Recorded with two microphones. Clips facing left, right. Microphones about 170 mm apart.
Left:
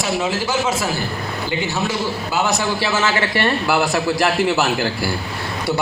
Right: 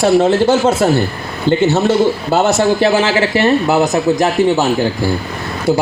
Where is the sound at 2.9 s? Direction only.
30° right (ahead or behind).